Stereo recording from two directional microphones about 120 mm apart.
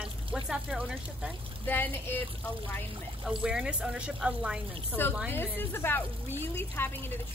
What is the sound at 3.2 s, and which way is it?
Speech, 5° right (ahead or behind).